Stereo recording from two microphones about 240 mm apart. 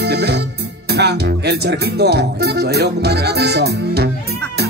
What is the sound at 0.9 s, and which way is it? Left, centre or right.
Speech, right.